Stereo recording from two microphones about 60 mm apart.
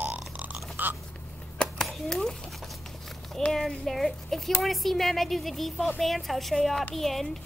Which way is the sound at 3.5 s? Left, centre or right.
Centre.